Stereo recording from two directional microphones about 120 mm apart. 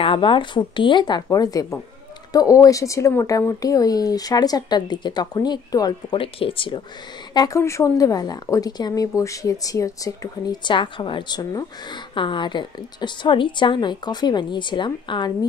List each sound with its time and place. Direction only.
0.0 s speech: 45° left (ahead or behind)
6.1 s speech: 50° left (ahead or behind)
7.3 s speech: 25° left (ahead or behind)